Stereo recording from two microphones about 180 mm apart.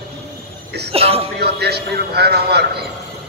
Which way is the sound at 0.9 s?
35° right (ahead or behind).